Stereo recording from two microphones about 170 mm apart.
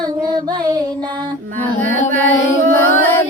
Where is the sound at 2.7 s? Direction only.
10° left (ahead or behind).